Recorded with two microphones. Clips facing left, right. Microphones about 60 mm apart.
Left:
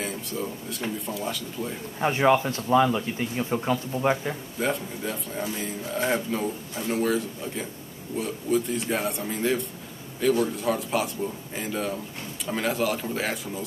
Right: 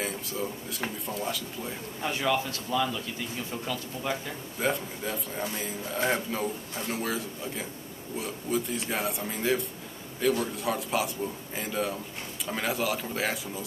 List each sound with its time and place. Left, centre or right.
0.0 s speech: centre
2.0 s speech: left
4.6 s speech: centre